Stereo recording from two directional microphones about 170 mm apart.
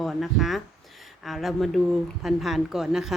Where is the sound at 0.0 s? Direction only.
Centre (ahead or behind).